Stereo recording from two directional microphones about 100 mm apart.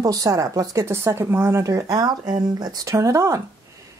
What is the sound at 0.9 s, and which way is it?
Speech, 25° right (ahead or behind).